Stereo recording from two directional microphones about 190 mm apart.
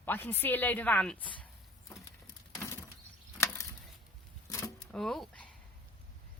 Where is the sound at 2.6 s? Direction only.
15° left (ahead or behind).